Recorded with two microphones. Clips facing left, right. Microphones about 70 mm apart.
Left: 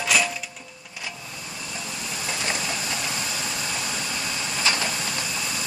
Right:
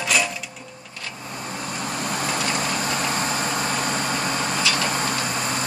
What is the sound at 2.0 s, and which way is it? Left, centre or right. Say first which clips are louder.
Vehicle: right 6 dB; right.